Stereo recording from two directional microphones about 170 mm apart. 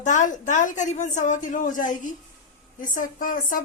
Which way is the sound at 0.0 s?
45° left (ahead or behind).